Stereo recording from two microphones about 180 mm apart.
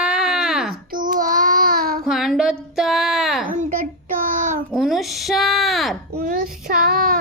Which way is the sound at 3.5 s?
50° right (ahead or behind).